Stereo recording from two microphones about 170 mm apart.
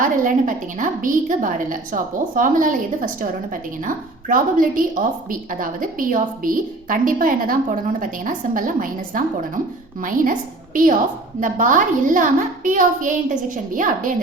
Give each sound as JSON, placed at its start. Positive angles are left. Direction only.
{"t": 0.0, "sound": "a woman's voice", "side_deg": -50}
{"t": 11.3, "sound": "a woman's voice", "side_deg": -50}